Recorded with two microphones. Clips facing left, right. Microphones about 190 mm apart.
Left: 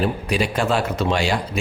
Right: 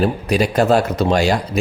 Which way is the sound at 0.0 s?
40° right (ahead or behind).